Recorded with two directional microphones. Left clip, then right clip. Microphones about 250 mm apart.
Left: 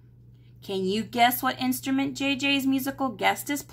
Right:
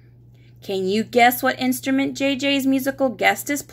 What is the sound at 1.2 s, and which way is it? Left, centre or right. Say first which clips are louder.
Speech: right 6 dB; left.